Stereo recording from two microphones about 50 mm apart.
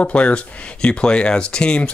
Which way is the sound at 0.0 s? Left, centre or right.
Left.